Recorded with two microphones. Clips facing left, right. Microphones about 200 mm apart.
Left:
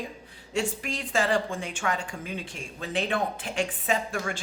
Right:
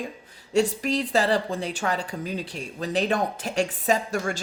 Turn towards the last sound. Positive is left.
turn(degrees=-40)  # may be behind; listen again after turning